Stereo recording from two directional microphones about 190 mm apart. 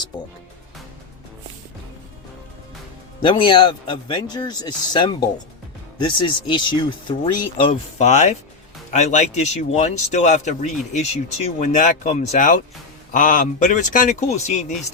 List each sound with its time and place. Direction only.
3.2 s a man's voice: 25° left (ahead or behind)
7.7 s speech: 40° left (ahead or behind)